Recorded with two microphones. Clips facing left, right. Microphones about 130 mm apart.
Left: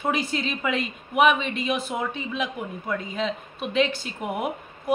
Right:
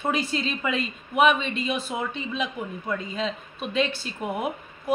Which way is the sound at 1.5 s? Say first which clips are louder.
Left 1 dB; 60° left (ahead or behind).